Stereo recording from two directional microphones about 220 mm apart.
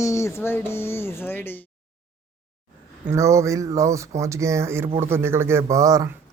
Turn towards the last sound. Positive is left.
turn(degrees=-15)  # may be behind; listen again after turning